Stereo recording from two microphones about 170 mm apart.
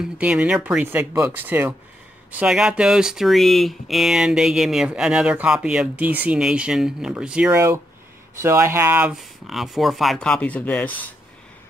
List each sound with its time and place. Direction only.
0.2 s speech: 5° right (ahead or behind)
7.5 s speech: 15° right (ahead or behind); by 11.1 s 10° left (ahead or behind)